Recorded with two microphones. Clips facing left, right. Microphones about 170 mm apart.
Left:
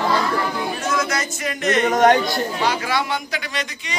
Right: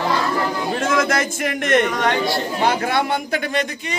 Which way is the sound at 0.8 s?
55° right (ahead or behind).